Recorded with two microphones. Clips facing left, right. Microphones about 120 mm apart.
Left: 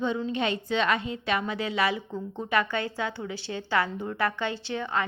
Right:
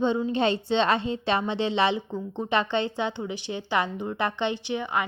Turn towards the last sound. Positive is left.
turn(degrees=-15)  # may be behind; listen again after turning